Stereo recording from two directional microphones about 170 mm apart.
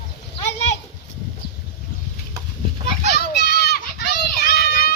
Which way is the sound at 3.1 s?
70° left (ahead or behind).